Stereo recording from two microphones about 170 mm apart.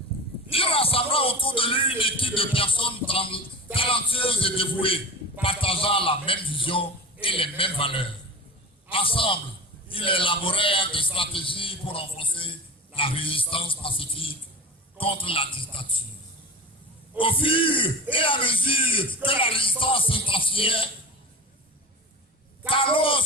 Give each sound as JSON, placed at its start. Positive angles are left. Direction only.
{"t": 0.5, "sound": "a man's voice", "side_deg": 35}
{"t": 17.2, "sound": "speech", "side_deg": 30}
{"t": 22.7, "sound": "speech", "side_deg": 30}